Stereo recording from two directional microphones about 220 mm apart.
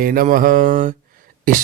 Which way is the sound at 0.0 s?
40° right (ahead or behind).